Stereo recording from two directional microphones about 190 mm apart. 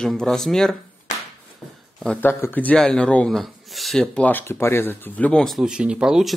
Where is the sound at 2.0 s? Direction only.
5° left (ahead or behind).